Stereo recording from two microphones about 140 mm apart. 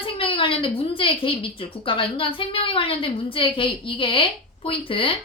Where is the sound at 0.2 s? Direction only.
40° left (ahead or behind).